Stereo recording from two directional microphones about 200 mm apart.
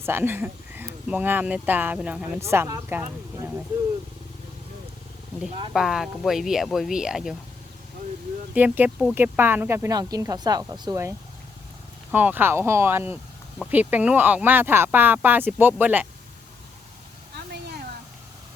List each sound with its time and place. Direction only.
0.0 s speech: 10° right (ahead or behind)
5.5 s speech: 25° right (ahead or behind)
5.7 s speech: centre (ahead or behind)
8.5 s speech: 10° right (ahead or behind)
12.1 s speech: 10° right (ahead or behind)
17.3 s a sound: 55° right (ahead or behind)